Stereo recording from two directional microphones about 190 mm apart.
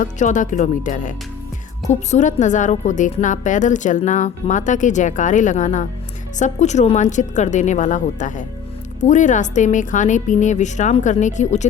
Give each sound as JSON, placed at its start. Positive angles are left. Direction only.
{"t": 0.0, "sound": "a woman's voice", "side_deg": 40}